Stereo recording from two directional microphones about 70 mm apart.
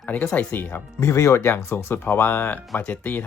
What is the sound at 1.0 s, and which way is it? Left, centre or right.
Speech, left.